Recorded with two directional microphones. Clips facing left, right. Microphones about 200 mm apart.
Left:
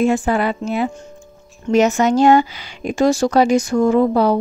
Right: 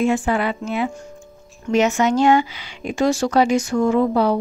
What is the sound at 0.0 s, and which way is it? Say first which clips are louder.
Speech: left 2 dB; 40° left (ahead or behind).